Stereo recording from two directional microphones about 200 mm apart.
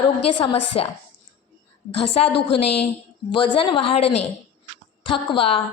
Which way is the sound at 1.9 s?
30° left (ahead or behind).